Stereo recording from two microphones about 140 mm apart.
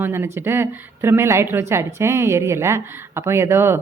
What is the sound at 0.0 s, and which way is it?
Speech, 15° right (ahead or behind).